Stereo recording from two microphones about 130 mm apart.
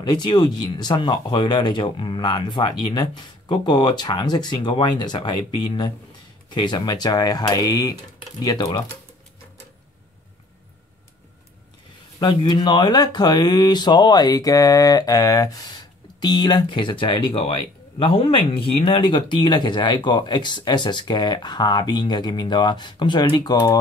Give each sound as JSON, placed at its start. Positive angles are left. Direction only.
{"t": 0.0, "sound": "speech", "side_deg": 35}
{"t": 12.2, "sound": "speech", "side_deg": 35}